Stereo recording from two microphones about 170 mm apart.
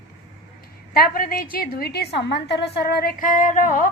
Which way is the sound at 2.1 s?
85° left.